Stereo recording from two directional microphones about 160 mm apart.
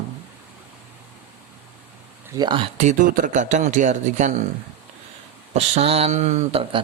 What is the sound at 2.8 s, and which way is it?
Speech, 55° right (ahead or behind).